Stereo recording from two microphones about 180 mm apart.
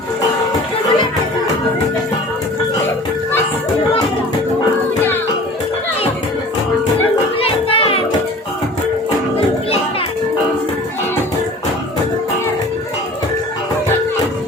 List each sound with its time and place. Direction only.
7.3 s music: 30° left (ahead or behind)